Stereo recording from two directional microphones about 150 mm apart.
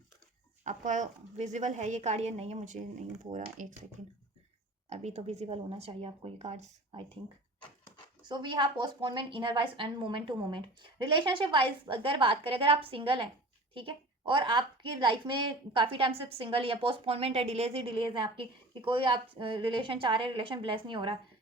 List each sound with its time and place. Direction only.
0.6 s speech: 55° right (ahead or behind)
4.9 s speech: 45° right (ahead or behind)
8.2 s a woman's voice: 30° right (ahead or behind)